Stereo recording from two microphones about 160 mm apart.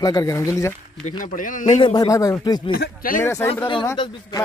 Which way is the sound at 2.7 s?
65° left (ahead or behind).